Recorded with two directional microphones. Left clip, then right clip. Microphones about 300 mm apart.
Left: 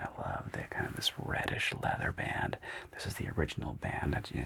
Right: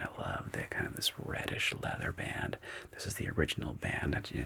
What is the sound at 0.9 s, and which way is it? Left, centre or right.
Speech, left.